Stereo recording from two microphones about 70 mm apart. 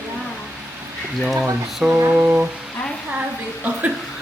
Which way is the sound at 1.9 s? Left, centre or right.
Right.